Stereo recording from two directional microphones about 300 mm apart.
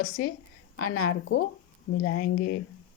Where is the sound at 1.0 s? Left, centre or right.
Left.